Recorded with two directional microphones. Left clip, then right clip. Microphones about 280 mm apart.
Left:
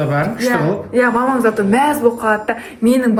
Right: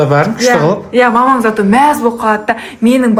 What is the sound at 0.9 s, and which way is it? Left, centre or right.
Speech, right.